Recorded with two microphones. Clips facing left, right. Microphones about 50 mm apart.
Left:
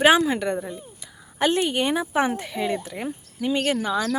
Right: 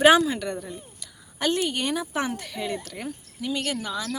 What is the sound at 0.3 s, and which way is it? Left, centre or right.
Speech, left.